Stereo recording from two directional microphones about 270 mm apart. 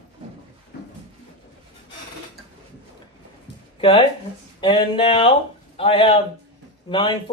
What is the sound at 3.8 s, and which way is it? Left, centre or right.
Speech, centre.